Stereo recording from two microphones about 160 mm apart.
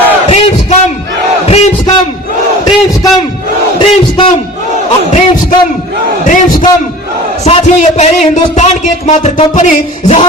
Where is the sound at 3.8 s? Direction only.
35° left (ahead or behind).